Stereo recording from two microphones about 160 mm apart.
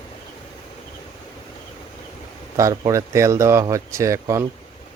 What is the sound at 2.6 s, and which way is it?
Speech, 20° right (ahead or behind).